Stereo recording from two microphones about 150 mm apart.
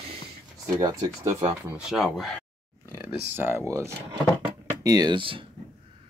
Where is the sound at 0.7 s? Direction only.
25° right (ahead or behind).